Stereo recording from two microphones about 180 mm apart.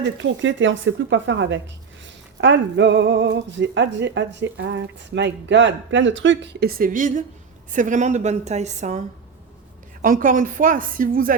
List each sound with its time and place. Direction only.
0.0 s a woman's voice: 90° right; by 11.3 s 50° right (ahead or behind)